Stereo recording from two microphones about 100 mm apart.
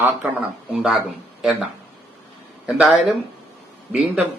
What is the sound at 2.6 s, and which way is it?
Speech, 5° right (ahead or behind).